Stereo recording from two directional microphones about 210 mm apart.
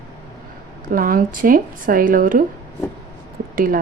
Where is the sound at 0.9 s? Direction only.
40° right (ahead or behind).